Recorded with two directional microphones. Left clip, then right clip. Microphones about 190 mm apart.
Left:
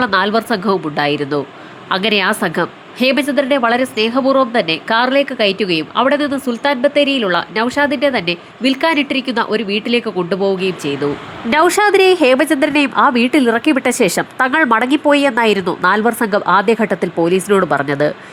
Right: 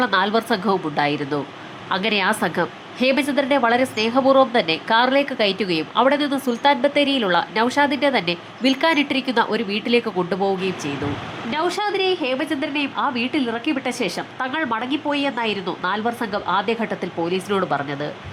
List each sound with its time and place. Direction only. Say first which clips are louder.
0.0 s a woman's voice: left 4 dB; 15° left (ahead or behind)
11.5 s a woman's voice: left 11 dB; 35° left (ahead or behind)